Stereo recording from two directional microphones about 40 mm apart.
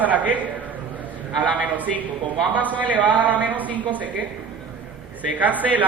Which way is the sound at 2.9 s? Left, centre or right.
Right.